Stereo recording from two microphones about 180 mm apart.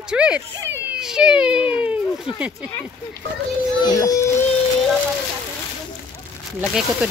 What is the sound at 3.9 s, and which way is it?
Speech, 20° left (ahead or behind).